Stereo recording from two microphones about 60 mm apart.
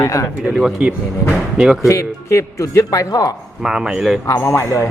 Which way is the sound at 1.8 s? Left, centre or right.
Left.